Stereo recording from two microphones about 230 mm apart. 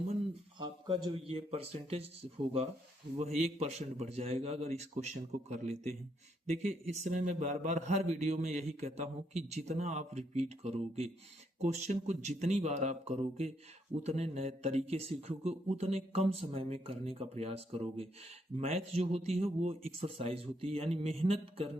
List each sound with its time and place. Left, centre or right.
0.9 s speech: right
3.3 s a man's voice: right